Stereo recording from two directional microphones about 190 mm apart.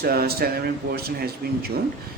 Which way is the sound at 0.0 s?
55° right (ahead or behind).